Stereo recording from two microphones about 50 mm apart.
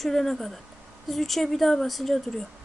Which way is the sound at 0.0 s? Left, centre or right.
Centre.